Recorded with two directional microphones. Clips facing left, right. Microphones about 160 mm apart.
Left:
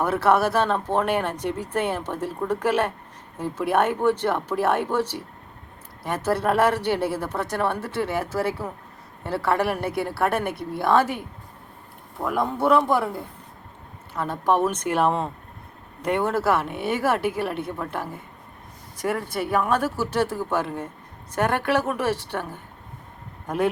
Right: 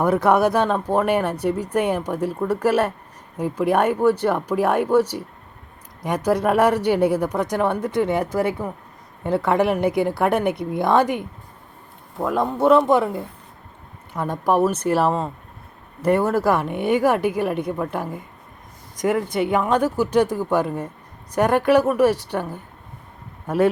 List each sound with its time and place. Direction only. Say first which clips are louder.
0.0 s speech: right 3 dB; 15° right (ahead or behind)
12.2 s speech: right 4 dB; 20° right (ahead or behind)
14.1 s speech: right 2 dB; 15° right (ahead or behind)
19.5 s speech: right 1 dB; 20° right (ahead or behind)